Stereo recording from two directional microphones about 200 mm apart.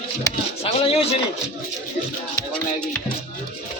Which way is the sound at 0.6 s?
30° left (ahead or behind).